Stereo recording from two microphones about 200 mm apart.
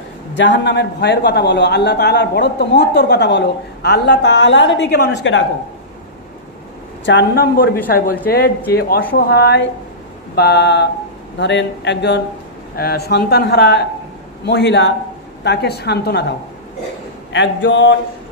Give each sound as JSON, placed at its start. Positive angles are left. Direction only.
{"t": 0.4, "sound": "a man's voice", "side_deg": 60}
{"t": 7.1, "sound": "a woman's voice", "side_deg": 55}